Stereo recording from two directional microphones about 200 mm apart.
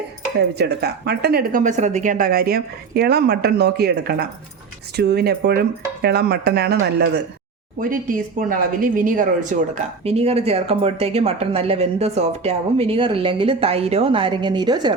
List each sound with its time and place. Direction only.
0.3 s a woman's voice: 55° right (ahead or behind)
7.8 s speech: 45° right (ahead or behind); by 14.9 s 20° right (ahead or behind)